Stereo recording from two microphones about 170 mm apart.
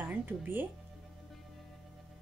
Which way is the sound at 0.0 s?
10° right (ahead or behind).